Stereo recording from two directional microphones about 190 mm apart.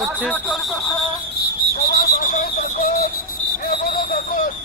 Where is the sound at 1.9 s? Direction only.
50° left (ahead or behind).